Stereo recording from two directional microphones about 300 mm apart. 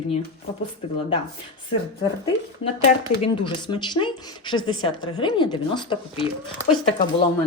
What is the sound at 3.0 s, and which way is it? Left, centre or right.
Speech, centre.